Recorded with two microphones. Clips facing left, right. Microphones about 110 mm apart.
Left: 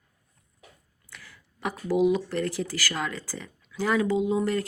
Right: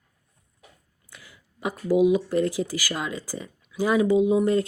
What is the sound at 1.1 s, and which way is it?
Speech, 15° right (ahead or behind).